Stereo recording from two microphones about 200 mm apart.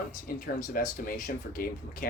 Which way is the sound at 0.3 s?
45° left (ahead or behind).